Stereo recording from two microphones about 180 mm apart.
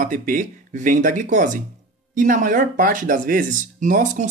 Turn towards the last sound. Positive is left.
turn(degrees=-45)  # may be behind; listen again after turning